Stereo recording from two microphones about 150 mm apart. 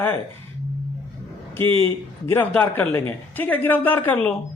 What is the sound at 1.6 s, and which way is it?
Speech, 15° left (ahead or behind).